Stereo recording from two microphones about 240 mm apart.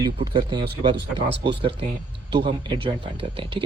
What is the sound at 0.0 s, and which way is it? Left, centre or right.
Speech, centre.